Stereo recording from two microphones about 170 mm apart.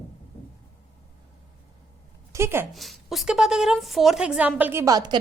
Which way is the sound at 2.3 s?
15° right (ahead or behind).